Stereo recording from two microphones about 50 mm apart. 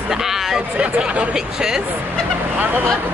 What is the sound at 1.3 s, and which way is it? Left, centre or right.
Speech, centre.